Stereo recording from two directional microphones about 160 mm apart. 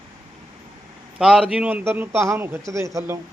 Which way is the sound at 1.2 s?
5° right (ahead or behind).